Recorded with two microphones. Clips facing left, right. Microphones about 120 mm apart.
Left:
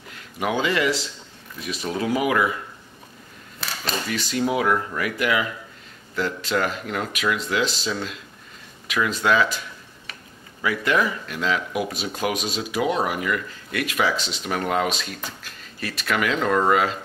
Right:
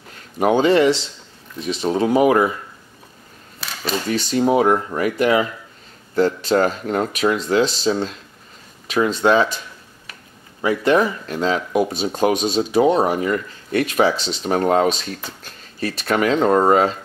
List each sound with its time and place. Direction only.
0.4 s speech: 35° right (ahead or behind)
3.6 s camera: centre (ahead or behind)
4.1 s speech: 30° right (ahead or behind)
10.6 s speech: 30° right (ahead or behind)